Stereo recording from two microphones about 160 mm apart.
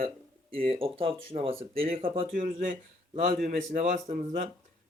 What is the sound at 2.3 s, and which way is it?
Speech, 55° right (ahead or behind).